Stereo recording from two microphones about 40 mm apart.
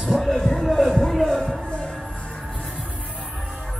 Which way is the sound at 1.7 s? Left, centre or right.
Left.